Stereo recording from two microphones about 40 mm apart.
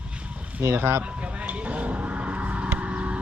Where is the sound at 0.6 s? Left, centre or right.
Right.